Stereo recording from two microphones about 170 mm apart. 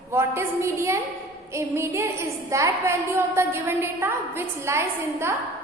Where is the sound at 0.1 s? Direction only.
15° right (ahead or behind).